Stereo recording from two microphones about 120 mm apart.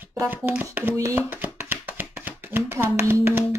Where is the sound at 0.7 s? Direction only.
20° right (ahead or behind).